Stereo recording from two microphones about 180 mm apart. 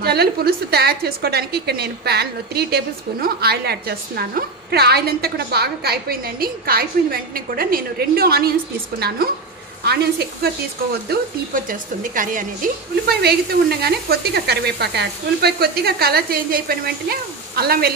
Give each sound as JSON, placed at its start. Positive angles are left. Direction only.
{"t": 0.0, "sound": "a woman's voice", "side_deg": -60}
{"t": 11.1, "sound": "a woman's voice", "side_deg": -50}